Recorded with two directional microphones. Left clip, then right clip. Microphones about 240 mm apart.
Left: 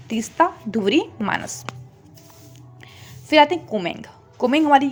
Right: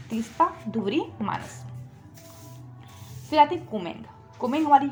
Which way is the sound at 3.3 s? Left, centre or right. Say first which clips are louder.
Left 5 dB; left.